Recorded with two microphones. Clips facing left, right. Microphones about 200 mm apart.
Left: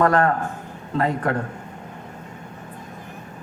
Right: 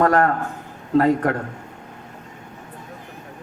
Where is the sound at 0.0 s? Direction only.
40° right (ahead or behind).